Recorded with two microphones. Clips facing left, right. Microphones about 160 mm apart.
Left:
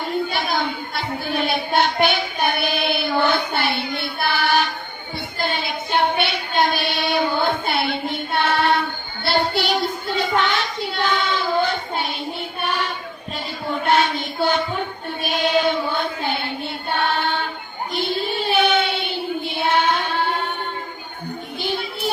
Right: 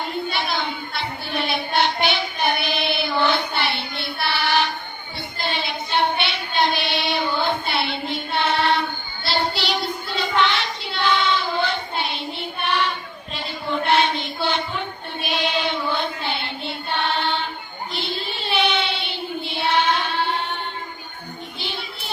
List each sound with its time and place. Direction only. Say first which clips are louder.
0.3 s a sound: left 2 dB; 45° left (ahead or behind)
5.4 s child singing: left 2 dB; 50° left (ahead or behind)
15.2 s chant: left 5 dB; 45° left (ahead or behind)
17.0 s choir: left 2 dB; 50° left (ahead or behind)
17.9 s child singing: left 7 dB; 50° left (ahead or behind)
21.6 s music: left 10 dB; 50° left (ahead or behind)